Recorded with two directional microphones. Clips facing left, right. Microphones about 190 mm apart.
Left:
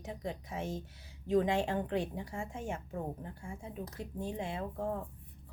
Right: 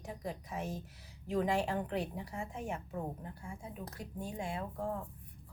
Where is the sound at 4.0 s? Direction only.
25° left (ahead or behind).